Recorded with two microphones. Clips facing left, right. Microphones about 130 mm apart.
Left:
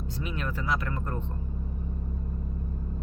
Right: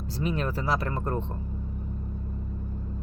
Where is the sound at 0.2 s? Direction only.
35° right (ahead or behind).